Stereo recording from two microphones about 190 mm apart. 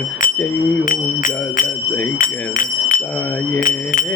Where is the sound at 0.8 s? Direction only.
45° left (ahead or behind).